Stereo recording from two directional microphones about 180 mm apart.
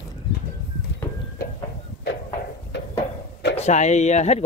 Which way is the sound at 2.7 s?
75° left (ahead or behind).